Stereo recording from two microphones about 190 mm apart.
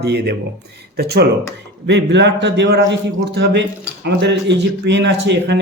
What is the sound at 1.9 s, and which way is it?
A man's voice, 65° right (ahead or behind).